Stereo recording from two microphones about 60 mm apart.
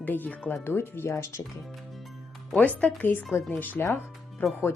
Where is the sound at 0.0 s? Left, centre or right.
Left.